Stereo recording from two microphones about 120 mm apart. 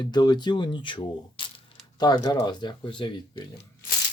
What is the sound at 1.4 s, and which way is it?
Mechanisms, 45° left (ahead or behind).